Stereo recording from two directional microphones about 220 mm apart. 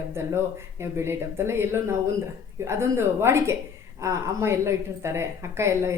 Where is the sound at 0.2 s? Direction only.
10° right (ahead or behind).